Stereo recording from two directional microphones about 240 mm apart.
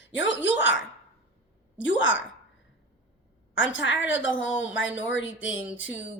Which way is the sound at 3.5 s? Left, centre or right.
Left.